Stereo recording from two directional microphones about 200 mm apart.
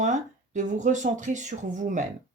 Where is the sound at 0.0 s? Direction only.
40° right (ahead or behind).